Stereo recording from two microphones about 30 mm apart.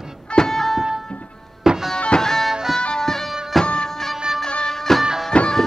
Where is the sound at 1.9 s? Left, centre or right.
Left.